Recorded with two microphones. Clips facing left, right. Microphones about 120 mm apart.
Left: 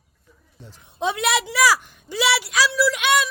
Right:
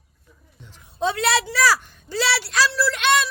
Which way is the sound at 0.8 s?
20° left (ahead or behind).